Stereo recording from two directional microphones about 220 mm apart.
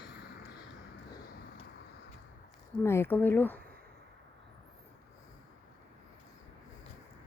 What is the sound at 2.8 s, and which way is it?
Speech, 10° left (ahead or behind).